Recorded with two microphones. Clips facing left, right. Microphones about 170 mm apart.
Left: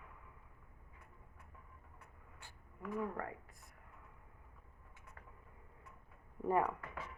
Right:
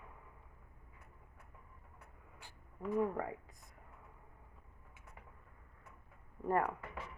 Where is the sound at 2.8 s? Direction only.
20° right (ahead or behind).